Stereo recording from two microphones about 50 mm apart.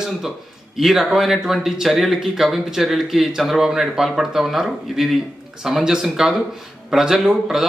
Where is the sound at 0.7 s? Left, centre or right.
Centre.